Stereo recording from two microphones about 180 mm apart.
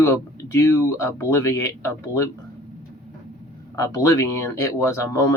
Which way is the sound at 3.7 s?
20° left (ahead or behind).